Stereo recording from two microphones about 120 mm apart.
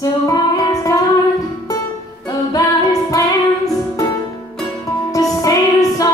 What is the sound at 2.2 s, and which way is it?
Music, 30° left (ahead or behind).